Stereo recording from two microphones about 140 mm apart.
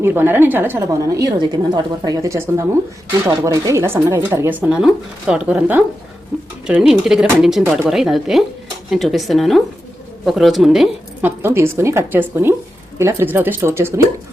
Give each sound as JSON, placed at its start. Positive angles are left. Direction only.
{"t": 0.0, "sound": "a woman's voice", "side_deg": -15}